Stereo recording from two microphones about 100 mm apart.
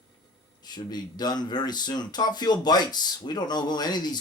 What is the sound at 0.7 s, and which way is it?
Speech, 45° left (ahead or behind).